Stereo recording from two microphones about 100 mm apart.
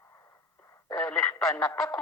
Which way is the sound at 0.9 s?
15° left (ahead or behind).